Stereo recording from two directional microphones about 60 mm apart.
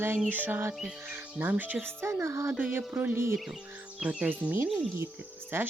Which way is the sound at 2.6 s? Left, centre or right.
Right.